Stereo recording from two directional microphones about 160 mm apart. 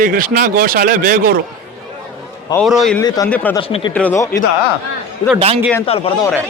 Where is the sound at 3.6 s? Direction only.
35° left (ahead or behind).